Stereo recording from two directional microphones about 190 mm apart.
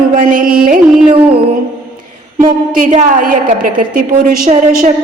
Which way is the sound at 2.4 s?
45° right (ahead or behind).